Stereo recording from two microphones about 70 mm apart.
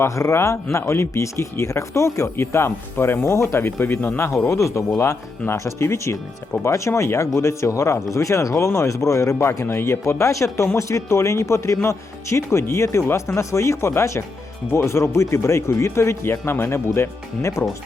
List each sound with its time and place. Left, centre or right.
0.0 s speech: left
4.4 s speech: left
10.0 s speech: left